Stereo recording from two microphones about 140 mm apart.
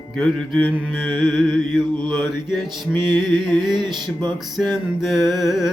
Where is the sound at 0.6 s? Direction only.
15° left (ahead or behind).